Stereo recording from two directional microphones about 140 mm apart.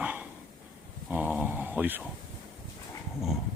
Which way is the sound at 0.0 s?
10° right (ahead or behind).